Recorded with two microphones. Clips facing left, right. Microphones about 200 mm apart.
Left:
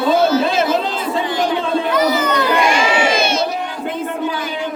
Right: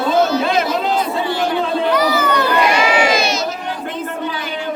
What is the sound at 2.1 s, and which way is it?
Crowd, 20° left (ahead or behind).